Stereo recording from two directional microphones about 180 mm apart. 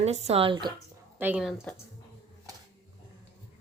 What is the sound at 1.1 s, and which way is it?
Speech, 10° right (ahead or behind).